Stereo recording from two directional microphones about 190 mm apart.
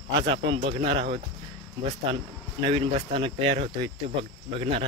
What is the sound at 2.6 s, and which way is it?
Speech, 30° right (ahead or behind).